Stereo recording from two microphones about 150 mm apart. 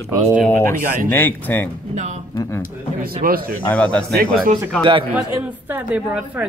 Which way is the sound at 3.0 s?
80° right.